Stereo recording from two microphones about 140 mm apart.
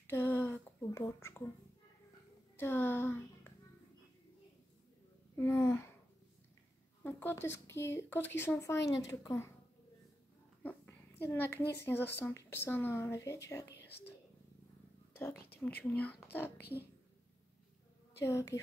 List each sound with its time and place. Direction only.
0.0 s a sound: 15° left (ahead or behind)
2.5 s a child's voice: 15° left (ahead or behind)
5.3 s speech: 20° left (ahead or behind)
7.0 s speech: 15° left (ahead or behind)
10.6 s speech: 10° left (ahead or behind)
15.6 s speech: 10° left (ahead or behind)
18.2 s a woman's voice: 20° left (ahead or behind)